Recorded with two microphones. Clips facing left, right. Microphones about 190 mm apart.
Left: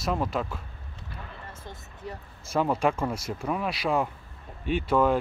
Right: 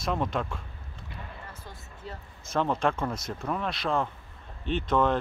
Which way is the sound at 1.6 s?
15° left (ahead or behind).